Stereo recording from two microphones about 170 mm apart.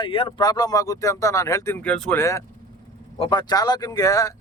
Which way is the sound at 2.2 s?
20° left (ahead or behind).